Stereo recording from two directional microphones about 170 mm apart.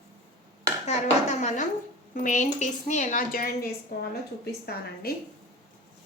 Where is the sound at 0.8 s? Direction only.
45° left (ahead or behind).